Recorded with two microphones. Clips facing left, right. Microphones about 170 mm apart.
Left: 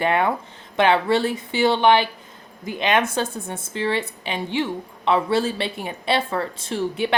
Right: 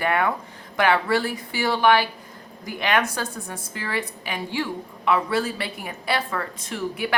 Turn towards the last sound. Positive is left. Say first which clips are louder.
# left 4 dB
turn(degrees=25)  # may be behind; listen again after turning